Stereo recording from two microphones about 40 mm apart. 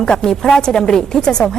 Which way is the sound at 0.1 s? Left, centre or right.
Centre.